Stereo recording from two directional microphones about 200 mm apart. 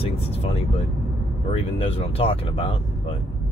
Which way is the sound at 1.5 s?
30° left (ahead or behind).